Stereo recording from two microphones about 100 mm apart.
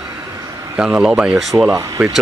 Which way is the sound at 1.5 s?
25° right (ahead or behind).